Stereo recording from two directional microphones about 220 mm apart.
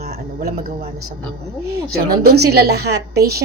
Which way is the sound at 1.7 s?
45° right (ahead or behind).